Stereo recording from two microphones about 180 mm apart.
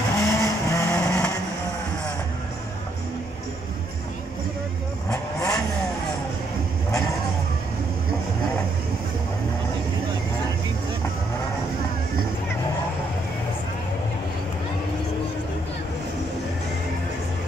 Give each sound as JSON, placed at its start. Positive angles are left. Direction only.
{"t": 0.2, "sound": "vehicle", "side_deg": 15}
{"t": 5.1, "sound": "vehicle", "side_deg": 20}